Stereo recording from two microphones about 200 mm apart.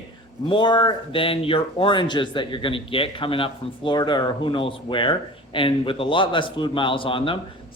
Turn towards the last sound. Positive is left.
turn(degrees=25)  # may be behind; listen again after turning